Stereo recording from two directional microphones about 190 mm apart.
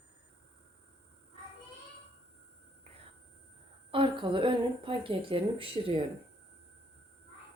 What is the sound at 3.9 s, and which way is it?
Speech, 25° right (ahead or behind).